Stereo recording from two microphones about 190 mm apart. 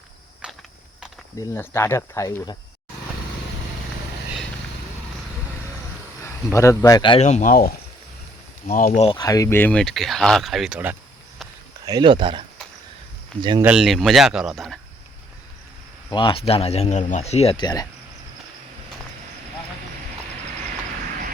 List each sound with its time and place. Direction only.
0.4 s mechanisms: 5° right (ahead or behind)
1.4 s speech: 15° left (ahead or behind)
6.2 s speech: 15° left (ahead or behind); by 9.0 s 45° left (ahead or behind)
9.1 s speech: 20° left (ahead or behind); by 10.9 s 5° right (ahead or behind)
11.9 s speech: 25° right (ahead or behind)
13.6 s speech: 5° right (ahead or behind)
16.0 s speech: 25° left (ahead or behind)